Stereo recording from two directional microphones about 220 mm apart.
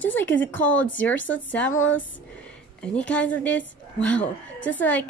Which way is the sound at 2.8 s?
5° left (ahead or behind).